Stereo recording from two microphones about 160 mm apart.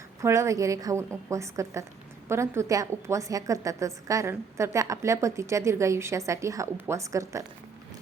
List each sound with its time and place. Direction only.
0.2 s a woman's voice: 20° right (ahead or behind)